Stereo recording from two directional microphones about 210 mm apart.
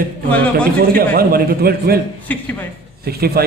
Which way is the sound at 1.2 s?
45° right (ahead or behind).